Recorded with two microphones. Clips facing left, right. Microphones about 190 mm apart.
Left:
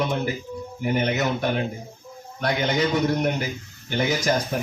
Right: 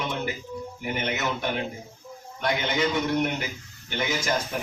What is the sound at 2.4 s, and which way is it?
Speech, 40° left (ahead or behind).